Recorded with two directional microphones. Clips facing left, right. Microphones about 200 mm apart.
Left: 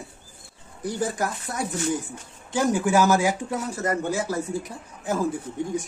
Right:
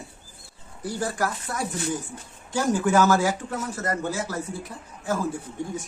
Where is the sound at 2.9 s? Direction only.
15° left (ahead or behind).